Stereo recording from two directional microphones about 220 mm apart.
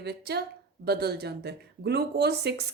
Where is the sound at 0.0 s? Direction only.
45° right (ahead or behind).